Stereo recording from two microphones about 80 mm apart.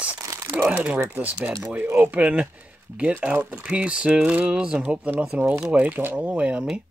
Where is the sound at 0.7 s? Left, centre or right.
Centre.